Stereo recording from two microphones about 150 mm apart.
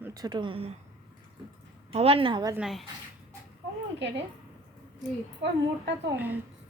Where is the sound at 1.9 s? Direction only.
40° right (ahead or behind).